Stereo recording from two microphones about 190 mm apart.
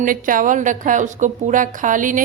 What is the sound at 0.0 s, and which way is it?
A woman's voice, 45° right (ahead or behind).